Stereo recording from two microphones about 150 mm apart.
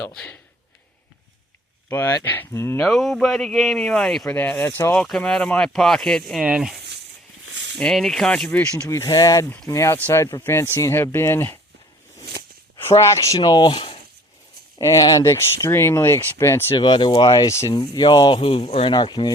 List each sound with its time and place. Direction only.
0.0 s speech: 5° left (ahead or behind)
1.9 s speech: 15° left (ahead or behind)
2.8 s speech: centre (ahead or behind)
4.4 s speech: 15° left (ahead or behind)
5.0 s speech: 5° left (ahead or behind)
7.8 s speech: 5° left (ahead or behind)
8.9 s speech: 25° left (ahead or behind)
14.8 s speech: 20° left (ahead or behind)
16.7 s speech: 30° left (ahead or behind)